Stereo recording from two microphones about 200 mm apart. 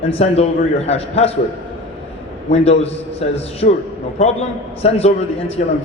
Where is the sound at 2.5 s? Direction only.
30° left (ahead or behind).